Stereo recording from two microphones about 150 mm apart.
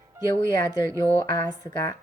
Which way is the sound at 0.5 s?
25° left (ahead or behind).